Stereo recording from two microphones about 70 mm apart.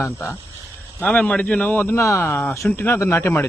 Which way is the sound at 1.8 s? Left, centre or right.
Left.